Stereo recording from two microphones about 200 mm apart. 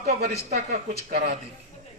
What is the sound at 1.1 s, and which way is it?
Speech, 50° right (ahead or behind).